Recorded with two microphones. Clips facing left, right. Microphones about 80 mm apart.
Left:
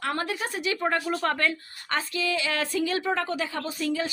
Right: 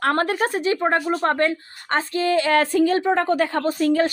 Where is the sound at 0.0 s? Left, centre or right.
Right.